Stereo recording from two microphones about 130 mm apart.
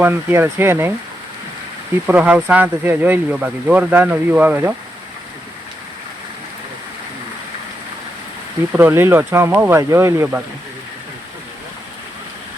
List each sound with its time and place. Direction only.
0.0 s speech: 15° right (ahead or behind)
2.0 s speech: 10° right (ahead or behind)
8.7 s speech: 15° right (ahead or behind)